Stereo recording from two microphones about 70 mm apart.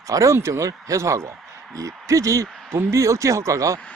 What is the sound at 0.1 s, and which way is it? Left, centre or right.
Speech, right.